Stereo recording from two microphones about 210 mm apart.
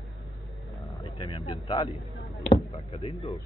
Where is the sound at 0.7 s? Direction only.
20° left (ahead or behind).